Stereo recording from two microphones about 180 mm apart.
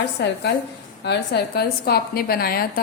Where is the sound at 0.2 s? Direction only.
70° left (ahead or behind).